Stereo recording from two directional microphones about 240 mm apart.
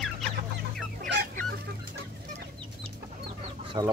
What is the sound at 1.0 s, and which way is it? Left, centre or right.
Chicken, right.